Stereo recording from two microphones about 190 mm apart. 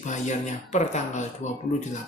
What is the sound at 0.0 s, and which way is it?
Speech, 40° left (ahead or behind).